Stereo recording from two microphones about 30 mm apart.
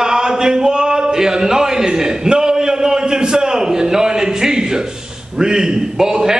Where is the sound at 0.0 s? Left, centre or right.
Right.